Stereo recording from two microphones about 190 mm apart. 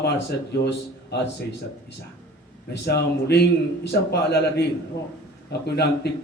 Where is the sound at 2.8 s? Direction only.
55° left (ahead or behind).